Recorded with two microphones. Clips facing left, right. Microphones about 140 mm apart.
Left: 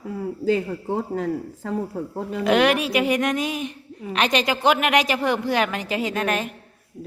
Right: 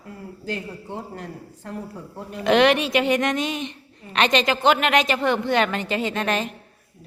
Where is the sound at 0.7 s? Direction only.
50° left (ahead or behind).